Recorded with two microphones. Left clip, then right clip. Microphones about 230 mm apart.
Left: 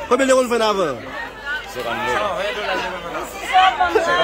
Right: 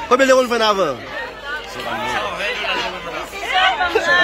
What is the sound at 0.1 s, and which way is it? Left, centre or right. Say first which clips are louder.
Speech: right 2 dB; centre.